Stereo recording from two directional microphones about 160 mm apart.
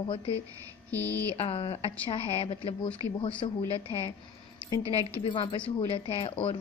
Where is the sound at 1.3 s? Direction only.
35° left (ahead or behind).